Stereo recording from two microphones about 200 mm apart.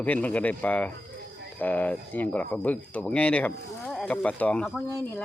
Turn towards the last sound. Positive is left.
turn(degrees=5)  # may be behind; listen again after turning